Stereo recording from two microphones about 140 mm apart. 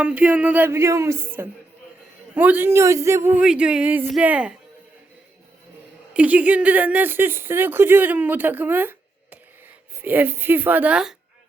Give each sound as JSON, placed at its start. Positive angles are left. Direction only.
{"t": 0.0, "sound": "speech", "side_deg": -10}
{"t": 3.4, "sound": "speech", "side_deg": -5}
{"t": 6.1, "sound": "speech", "side_deg": -10}